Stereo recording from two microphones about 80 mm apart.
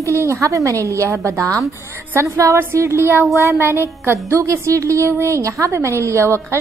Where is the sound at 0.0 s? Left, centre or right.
Right.